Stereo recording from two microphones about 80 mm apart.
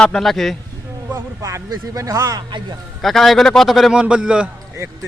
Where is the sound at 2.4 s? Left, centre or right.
Right.